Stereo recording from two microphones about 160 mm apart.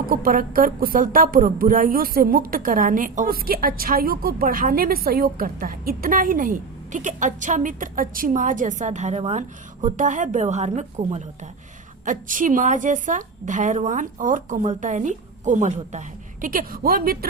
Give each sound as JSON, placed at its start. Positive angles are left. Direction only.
{"t": 0.1, "sound": "a woman's voice", "side_deg": -65}
{"t": 12.0, "sound": "a woman's voice", "side_deg": -55}